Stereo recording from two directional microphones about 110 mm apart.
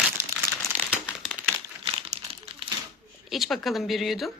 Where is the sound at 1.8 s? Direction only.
65° right (ahead or behind).